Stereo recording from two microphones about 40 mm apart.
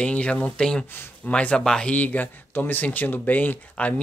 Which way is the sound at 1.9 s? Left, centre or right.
Left.